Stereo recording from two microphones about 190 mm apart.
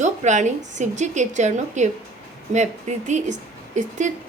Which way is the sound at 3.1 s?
40° right (ahead or behind).